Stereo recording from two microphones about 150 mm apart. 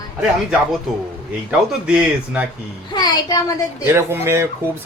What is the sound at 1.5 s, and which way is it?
Speech, 5° right (ahead or behind).